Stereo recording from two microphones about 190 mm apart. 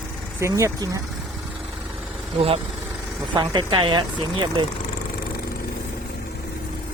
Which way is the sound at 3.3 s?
25° right (ahead or behind).